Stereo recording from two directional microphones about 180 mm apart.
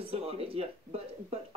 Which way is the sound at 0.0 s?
35° right (ahead or behind).